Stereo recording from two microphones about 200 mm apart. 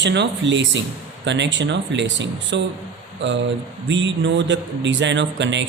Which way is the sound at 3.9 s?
65° right (ahead or behind).